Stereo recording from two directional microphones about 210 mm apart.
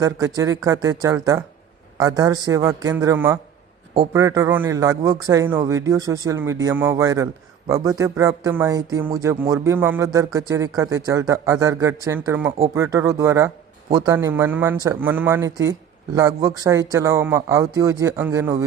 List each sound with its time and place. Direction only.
0.0 s a man's voice: 15° right (ahead or behind)